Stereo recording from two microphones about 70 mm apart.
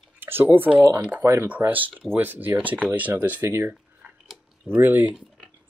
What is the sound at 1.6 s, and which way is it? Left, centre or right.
Speech, right.